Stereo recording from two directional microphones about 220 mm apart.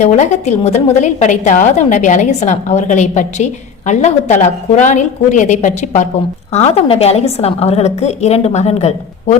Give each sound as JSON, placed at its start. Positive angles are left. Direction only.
{"t": 0.0, "sound": "a woman's voice", "side_deg": 30}